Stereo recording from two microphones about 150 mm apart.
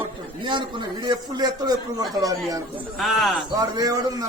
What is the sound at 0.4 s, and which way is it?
A man's voice, 30° right (ahead or behind).